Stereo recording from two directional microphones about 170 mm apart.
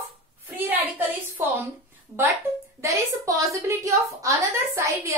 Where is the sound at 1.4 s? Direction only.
10° right (ahead or behind).